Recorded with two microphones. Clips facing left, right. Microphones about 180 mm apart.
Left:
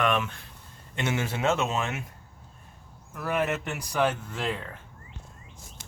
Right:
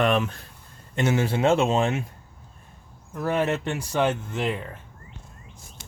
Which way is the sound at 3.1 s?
30° right (ahead or behind).